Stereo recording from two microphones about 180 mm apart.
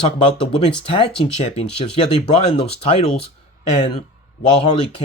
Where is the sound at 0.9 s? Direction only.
30° left (ahead or behind).